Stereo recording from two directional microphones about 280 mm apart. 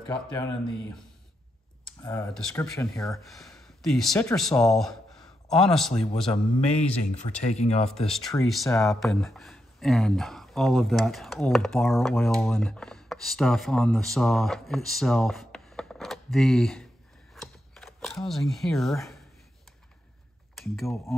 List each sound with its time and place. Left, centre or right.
0.1 s speech: centre
1.9 s speech: centre
6.3 s speech: left
8.1 s speech: centre
17.3 s camera: centre
20.7 s speech: centre